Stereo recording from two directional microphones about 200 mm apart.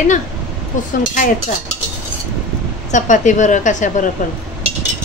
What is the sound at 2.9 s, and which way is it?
Speech, 40° left (ahead or behind).